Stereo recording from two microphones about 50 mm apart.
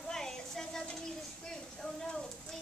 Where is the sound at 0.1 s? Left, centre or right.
Centre.